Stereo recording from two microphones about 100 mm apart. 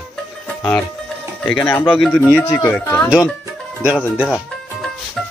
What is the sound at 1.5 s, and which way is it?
Speech, 15° left (ahead or behind).